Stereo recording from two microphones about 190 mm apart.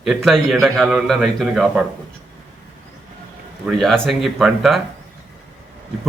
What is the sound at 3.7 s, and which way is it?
A man's voice, centre (ahead or behind).